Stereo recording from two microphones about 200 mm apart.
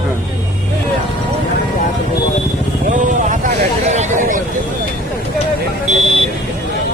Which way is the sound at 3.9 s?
40° right (ahead or behind).